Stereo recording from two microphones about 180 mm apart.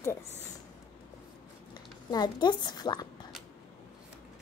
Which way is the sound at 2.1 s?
25° left (ahead or behind).